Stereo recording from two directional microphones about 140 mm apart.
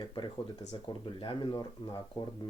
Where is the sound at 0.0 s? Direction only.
30° left (ahead or behind).